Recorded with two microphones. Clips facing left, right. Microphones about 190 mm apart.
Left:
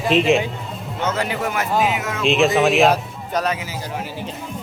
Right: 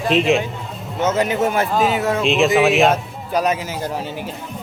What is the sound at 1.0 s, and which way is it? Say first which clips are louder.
A man's voice: right 5 dB; 20° right (ahead or behind).